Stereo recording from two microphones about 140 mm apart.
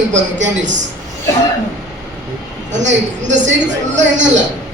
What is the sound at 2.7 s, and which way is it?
A man's voice, 60° right (ahead or behind).